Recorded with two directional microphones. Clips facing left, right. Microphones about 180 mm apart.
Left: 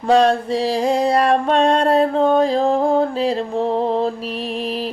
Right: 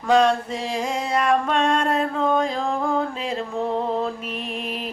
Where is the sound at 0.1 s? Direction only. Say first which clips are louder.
Left 4 dB; 35° left (ahead or behind).